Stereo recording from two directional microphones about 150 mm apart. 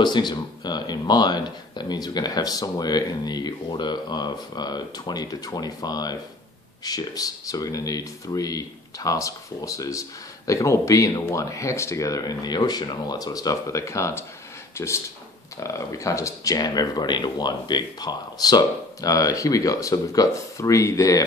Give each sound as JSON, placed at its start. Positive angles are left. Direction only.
{"t": 0.0, "sound": "speech", "side_deg": 30}